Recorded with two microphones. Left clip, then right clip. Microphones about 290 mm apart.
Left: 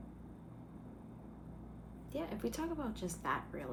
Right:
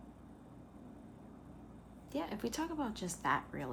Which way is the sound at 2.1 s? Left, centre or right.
Right.